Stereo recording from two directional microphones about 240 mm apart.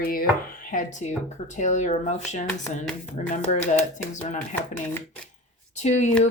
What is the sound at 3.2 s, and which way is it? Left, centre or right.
Speech, left.